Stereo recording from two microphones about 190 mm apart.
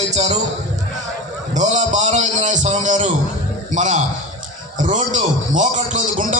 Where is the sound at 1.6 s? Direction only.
40° right (ahead or behind).